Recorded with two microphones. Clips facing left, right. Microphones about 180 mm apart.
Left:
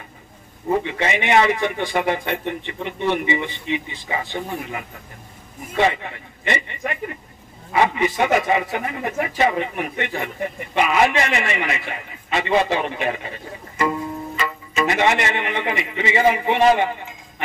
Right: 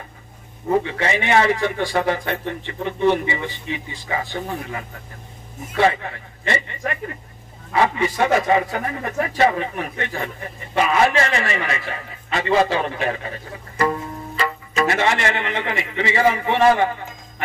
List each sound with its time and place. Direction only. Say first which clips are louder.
0.8 s a man's voice: even; 20° left (ahead or behind)